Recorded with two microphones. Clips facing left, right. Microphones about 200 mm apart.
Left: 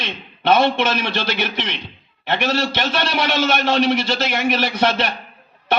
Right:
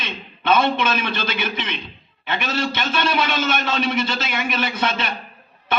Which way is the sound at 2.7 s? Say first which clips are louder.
Left 1 dB; 65° left (ahead or behind).